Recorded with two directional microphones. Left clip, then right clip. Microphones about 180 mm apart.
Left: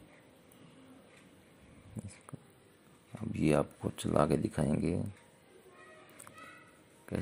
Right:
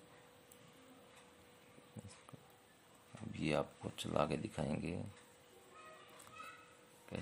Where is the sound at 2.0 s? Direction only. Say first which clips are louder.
Left 9 dB; centre (ahead or behind).